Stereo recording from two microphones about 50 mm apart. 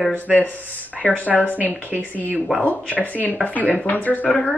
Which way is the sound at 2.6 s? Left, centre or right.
Left.